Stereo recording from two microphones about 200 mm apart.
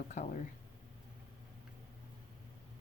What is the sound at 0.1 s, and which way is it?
Speech, 35° left (ahead or behind).